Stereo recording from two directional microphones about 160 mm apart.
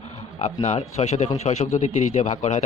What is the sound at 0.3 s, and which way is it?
A man's voice, 40° left (ahead or behind).